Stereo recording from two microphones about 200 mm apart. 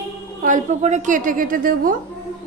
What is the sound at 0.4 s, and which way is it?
A woman's voice, 40° right (ahead or behind).